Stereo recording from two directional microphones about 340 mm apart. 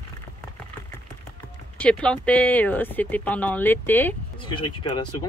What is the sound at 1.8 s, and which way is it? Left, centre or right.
Speech, centre.